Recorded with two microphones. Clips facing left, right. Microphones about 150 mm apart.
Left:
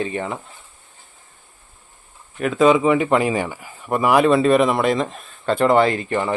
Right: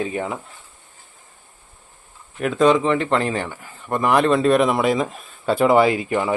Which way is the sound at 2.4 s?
Centre (ahead or behind).